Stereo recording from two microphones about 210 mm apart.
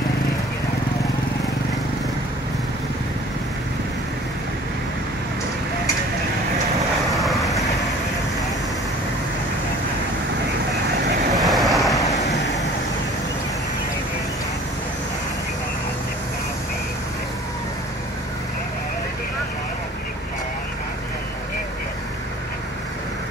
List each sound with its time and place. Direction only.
7.2 s vehicle: centre (ahead or behind)
7.4 s vehicle: 15° left (ahead or behind)
11.3 s vehicle: centre (ahead or behind)
11.9 s waves: 15° left (ahead or behind)